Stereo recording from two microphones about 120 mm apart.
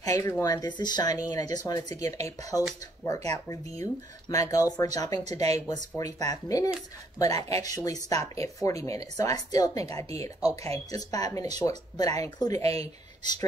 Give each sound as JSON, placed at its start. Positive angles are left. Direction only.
{"t": 0.0, "sound": "speech", "side_deg": 25}